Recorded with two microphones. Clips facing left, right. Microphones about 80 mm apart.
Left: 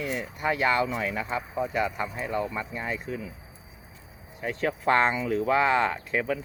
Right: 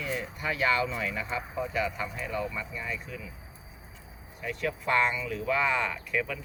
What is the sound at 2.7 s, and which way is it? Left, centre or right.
Speech, left.